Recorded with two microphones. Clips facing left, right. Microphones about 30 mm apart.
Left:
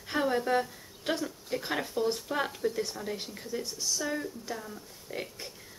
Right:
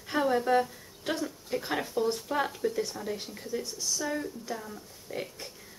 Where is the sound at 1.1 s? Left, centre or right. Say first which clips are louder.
Even; centre.